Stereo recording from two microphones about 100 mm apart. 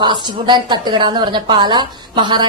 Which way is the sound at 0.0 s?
50° right (ahead or behind).